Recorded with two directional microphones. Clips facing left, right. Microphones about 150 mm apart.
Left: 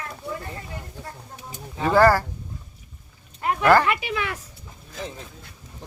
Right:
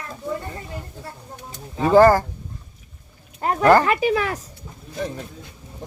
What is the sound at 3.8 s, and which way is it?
Speech, 40° right (ahead or behind).